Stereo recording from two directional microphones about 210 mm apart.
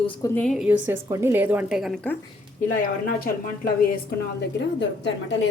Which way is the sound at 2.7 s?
45° left (ahead or behind).